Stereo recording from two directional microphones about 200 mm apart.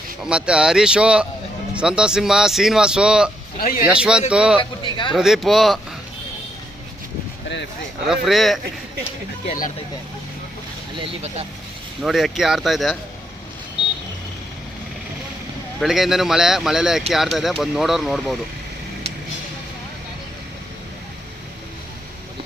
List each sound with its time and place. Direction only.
0.2 s speech: 5° right (ahead or behind)
3.6 s a man's voice: 45° left (ahead or behind)
3.8 s speech: 5° right (ahead or behind)
4.8 s a sound: 25° left (ahead or behind)
5.1 s speech: centre (ahead or behind)
8.0 s speech: centre (ahead or behind)
9.5 s speech: 40° left (ahead or behind)
10.9 s speech: 30° right (ahead or behind)
12.0 s speech: centre (ahead or behind)
15.8 s speech: centre (ahead or behind)